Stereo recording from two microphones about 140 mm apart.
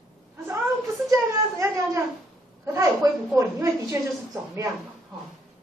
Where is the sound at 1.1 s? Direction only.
20° right (ahead or behind).